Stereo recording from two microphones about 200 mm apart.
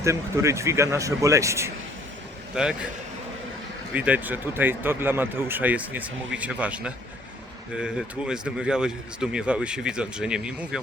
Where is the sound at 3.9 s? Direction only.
5° right (ahead or behind).